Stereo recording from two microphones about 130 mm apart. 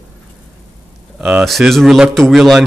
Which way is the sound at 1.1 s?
5° right (ahead or behind).